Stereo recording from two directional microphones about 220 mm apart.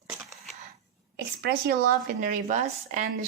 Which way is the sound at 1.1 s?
45° right (ahead or behind).